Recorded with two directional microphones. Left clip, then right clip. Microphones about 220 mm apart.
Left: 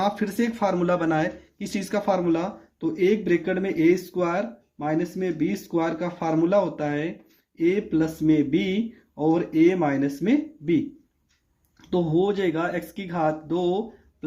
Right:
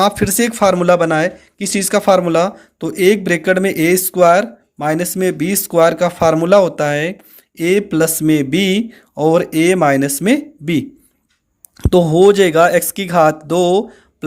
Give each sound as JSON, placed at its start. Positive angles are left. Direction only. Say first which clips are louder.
{"t": 0.0, "sound": "speech", "louder": "right 11 dB", "side_deg": -45}